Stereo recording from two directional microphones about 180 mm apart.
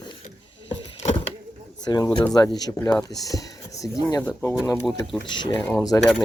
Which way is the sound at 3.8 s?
20° left (ahead or behind).